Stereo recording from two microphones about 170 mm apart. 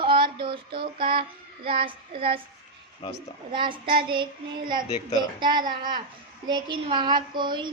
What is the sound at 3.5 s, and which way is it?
Child singing, 30° right (ahead or behind).